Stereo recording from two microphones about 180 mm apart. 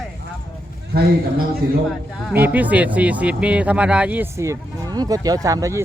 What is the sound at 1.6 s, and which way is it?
Speech, 55° right (ahead or behind).